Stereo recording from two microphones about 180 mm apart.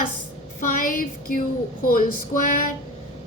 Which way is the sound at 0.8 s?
50° left (ahead or behind).